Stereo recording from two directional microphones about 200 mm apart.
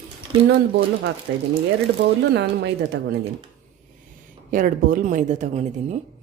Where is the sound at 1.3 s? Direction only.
70° right (ahead or behind).